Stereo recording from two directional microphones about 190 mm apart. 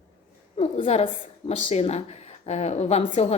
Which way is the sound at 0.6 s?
30° left (ahead or behind).